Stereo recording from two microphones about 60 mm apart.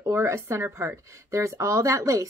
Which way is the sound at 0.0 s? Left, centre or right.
Right.